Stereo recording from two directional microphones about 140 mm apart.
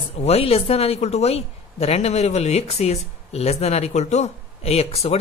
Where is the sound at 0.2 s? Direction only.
45° left (ahead or behind).